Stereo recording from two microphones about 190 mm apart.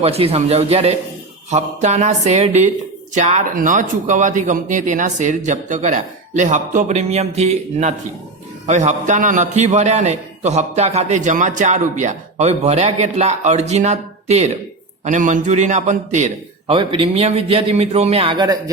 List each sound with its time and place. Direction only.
0.0 s a man's voice: 30° right (ahead or behind)
16.7 s a man's voice: 25° right (ahead or behind)